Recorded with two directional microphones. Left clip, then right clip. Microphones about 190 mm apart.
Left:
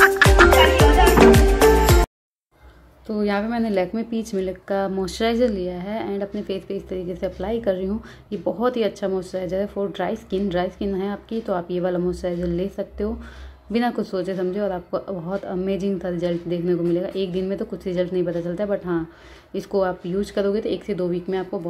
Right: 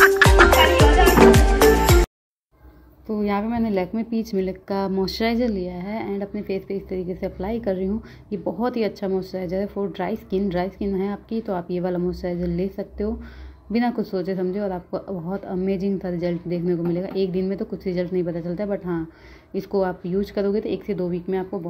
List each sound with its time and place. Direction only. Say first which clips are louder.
0.0 s music: even; centre (ahead or behind)
3.1 s a woman's voice: left 1 dB; 15° right (ahead or behind)